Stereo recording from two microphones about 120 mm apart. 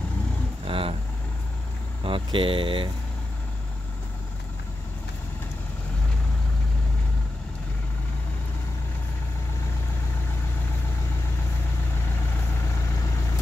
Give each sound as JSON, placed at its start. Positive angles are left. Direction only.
{"t": 0.7, "sound": "vehicle", "side_deg": -50}
{"t": 2.0, "sound": "speech", "side_deg": -45}